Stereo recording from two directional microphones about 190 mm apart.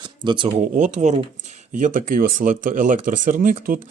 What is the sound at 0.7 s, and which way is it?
Speech, 40° right (ahead or behind).